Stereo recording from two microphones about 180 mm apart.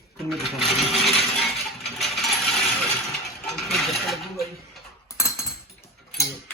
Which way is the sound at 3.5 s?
Centre (ahead or behind).